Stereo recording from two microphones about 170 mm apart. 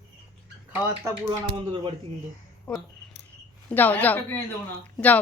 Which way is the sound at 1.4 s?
30° right (ahead or behind).